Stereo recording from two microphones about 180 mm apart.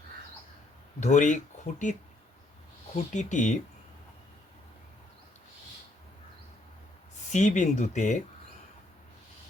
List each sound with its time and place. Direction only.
0.9 s speech: 40° left (ahead or behind)
7.2 s speech: 40° left (ahead or behind)